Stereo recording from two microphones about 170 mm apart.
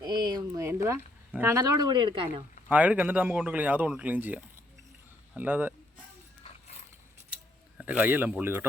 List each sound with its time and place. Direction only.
0.0 s a sound: 25° right (ahead or behind)
1.3 s speech: 15° right (ahead or behind); by 2.3 s 30° right (ahead or behind)
2.6 s a man's voice: 10° right (ahead or behind)
7.8 s a man's voice: 10° right (ahead or behind)